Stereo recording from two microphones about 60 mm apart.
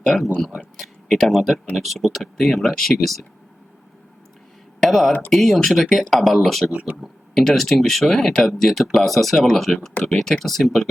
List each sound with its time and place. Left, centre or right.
0.1 s speech: centre
4.8 s speech: centre
6.7 s speech: right
6.9 s speech: centre